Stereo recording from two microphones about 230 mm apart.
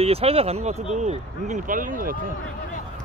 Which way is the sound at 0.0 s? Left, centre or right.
Right.